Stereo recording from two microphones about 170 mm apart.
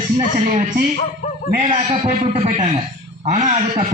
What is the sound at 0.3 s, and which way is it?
Speech, 45° right (ahead or behind).